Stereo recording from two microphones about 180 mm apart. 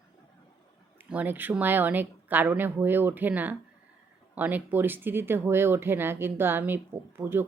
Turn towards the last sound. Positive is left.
turn(degrees=-10)  # may be behind; listen again after turning